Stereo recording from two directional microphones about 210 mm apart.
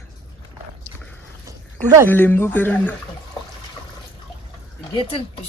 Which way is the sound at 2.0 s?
10° left (ahead or behind).